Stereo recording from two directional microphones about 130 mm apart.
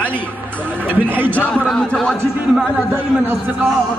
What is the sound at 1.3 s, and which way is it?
A man's voice, 5° left (ahead or behind).